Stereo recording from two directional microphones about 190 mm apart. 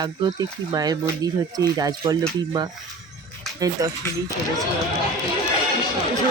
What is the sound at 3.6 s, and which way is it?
Speech, 20° right (ahead or behind).